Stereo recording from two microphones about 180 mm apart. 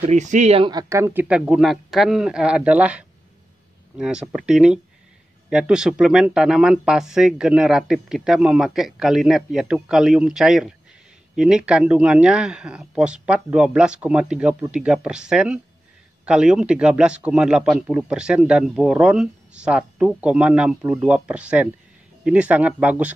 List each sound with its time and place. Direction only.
0.0 s speech: 40° right (ahead or behind)
0.7 s a man's voice: 20° right (ahead or behind)